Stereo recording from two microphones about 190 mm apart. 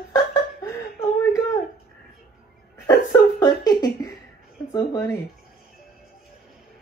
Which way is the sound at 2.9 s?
15° left (ahead or behind).